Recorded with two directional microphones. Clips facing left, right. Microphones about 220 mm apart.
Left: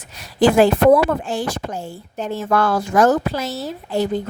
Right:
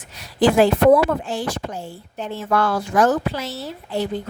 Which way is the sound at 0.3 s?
45° left (ahead or behind).